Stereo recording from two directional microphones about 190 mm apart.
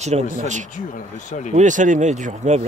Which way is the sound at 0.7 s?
40° left (ahead or behind).